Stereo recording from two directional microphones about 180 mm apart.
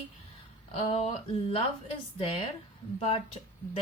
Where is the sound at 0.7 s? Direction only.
35° left (ahead or behind).